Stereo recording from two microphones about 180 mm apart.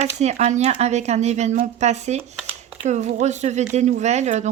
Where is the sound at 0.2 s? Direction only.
40° right (ahead or behind).